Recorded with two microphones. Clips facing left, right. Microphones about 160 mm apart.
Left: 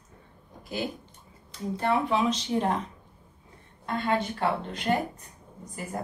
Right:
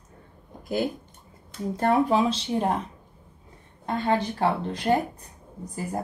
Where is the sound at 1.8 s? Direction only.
40° right (ahead or behind).